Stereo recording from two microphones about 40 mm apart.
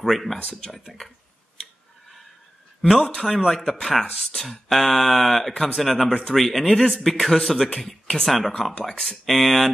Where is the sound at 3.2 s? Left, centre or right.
Centre.